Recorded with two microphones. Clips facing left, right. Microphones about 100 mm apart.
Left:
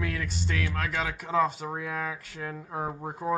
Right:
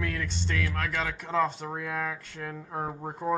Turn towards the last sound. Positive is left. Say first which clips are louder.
# even
turn(degrees=5)  # may be behind; listen again after turning